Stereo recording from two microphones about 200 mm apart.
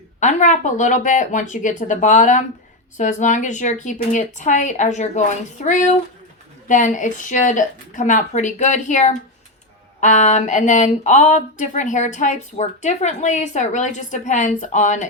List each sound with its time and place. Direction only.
0.2 s speech: 35° left (ahead or behind)